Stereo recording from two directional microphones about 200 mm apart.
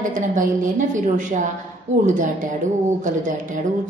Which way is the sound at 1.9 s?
35° right (ahead or behind).